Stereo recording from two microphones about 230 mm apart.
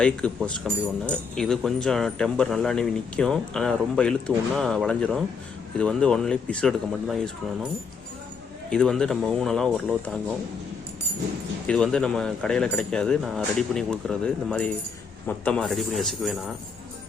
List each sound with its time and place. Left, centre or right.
0.0 s speech: centre
8.7 s speech: centre
11.6 s speech: centre